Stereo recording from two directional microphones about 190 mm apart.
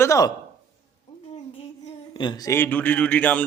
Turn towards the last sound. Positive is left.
turn(degrees=5)  # may be behind; listen again after turning